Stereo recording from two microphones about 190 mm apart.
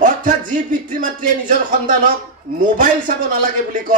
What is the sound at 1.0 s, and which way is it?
Speech, 45° right (ahead or behind).